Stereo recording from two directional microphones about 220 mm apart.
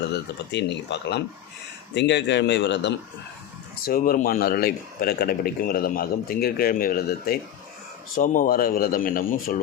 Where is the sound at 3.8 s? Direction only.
40° left (ahead or behind).